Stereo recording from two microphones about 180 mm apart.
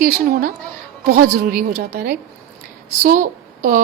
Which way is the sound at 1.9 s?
70° right (ahead or behind).